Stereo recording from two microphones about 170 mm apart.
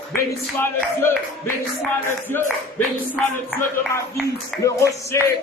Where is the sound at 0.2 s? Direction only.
15° left (ahead or behind).